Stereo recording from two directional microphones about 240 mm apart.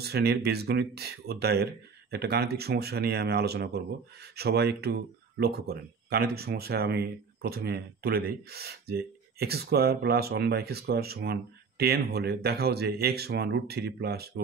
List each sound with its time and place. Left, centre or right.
0.0 s speech: right